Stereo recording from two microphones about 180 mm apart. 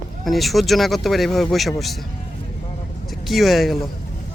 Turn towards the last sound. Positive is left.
turn(degrees=0)  # may be behind; listen again after turning